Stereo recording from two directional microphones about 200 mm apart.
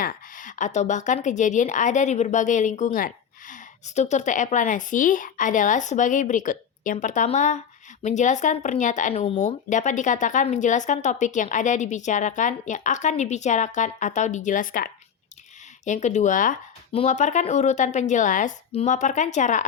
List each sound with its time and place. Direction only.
0.0 s speech: 40° left (ahead or behind)